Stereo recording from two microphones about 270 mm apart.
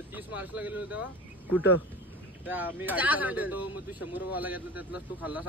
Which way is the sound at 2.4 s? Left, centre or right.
Centre.